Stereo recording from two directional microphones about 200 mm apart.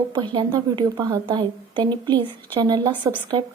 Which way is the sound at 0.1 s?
20° right (ahead or behind).